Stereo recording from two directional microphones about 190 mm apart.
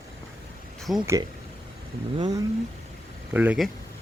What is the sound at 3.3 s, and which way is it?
Speech, 10° right (ahead or behind).